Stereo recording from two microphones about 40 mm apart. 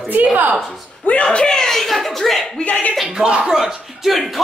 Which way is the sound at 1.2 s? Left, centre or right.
Centre.